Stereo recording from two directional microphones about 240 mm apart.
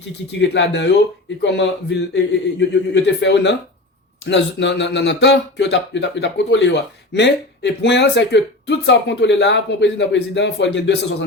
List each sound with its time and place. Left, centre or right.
0.3 s speech: left